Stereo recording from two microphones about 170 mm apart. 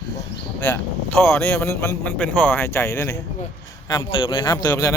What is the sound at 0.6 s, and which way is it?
Speech, 10° left (ahead or behind).